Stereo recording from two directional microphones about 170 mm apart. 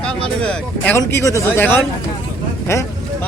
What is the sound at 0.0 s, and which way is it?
Speech, 5° left (ahead or behind).